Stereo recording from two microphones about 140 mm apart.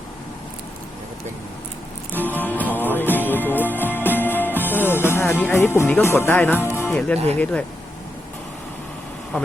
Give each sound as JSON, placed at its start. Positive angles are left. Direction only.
{"t": 2.1, "sound": "music", "side_deg": 15}
{"t": 6.0, "sound": "speech", "side_deg": 20}